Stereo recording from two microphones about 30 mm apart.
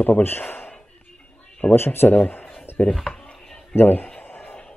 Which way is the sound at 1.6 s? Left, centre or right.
Left.